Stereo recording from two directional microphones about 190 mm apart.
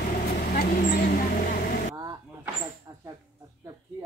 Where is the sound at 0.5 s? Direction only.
55° left (ahead or behind).